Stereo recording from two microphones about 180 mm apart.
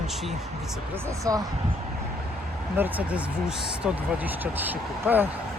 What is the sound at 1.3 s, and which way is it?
Speech, 20° right (ahead or behind).